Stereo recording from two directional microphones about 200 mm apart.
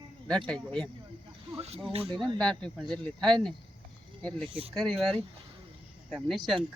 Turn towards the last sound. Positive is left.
turn(degrees=0)  # may be behind; listen again after turning